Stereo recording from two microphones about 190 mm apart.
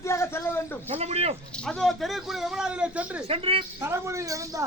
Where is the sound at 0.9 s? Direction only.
30° right (ahead or behind).